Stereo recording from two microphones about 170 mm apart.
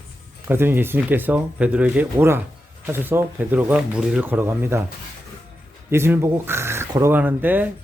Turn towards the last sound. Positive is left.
turn(degrees=-10)  # may be behind; listen again after turning